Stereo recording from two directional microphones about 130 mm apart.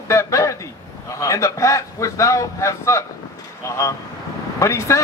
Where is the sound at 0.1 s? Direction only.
25° left (ahead or behind).